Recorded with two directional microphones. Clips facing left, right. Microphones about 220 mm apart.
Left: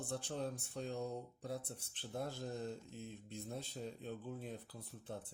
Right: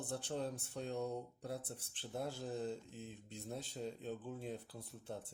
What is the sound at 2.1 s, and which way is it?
A man's voice, 5° right (ahead or behind).